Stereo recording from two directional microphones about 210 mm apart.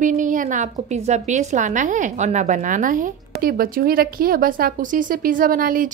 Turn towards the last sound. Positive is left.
turn(degrees=-40)  # may be behind; listen again after turning